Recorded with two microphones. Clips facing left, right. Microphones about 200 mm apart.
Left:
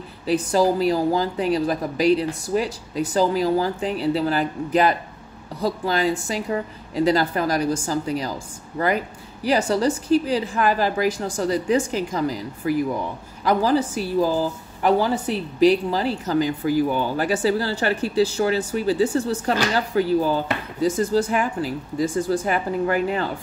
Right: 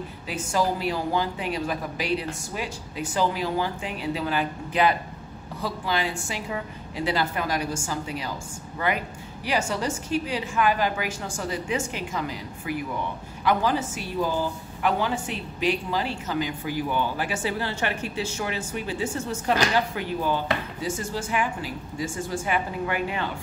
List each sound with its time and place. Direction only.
0.3 s a woman's voice: 35° left (ahead or behind)